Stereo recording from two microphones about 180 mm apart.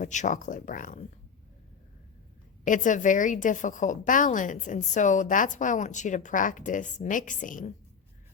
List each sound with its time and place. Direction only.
0.0 s a woman's voice: 45° left (ahead or behind)
2.6 s a woman's voice: 45° left (ahead or behind)